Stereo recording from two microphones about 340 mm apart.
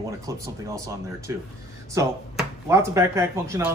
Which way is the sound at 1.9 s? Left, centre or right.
Centre.